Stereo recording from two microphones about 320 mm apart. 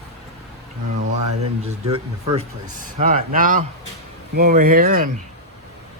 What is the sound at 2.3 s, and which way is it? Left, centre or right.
Speech, right.